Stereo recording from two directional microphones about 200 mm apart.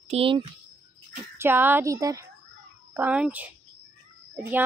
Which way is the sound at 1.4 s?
10° right (ahead or behind).